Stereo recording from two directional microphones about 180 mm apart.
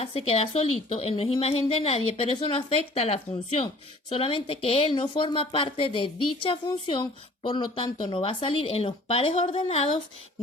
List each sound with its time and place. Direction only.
0.0 s a woman's voice: 30° left (ahead or behind)